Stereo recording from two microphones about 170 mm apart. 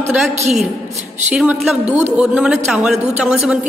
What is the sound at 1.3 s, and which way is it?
A woman's voice, 5° right (ahead or behind).